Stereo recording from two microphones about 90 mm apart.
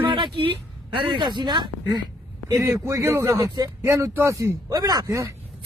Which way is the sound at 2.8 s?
35° right (ahead or behind).